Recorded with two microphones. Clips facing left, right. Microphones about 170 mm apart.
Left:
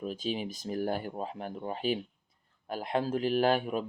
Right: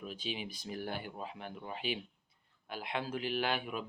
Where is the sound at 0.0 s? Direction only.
40° left (ahead or behind).